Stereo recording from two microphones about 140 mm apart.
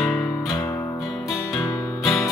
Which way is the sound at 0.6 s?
20° left (ahead or behind).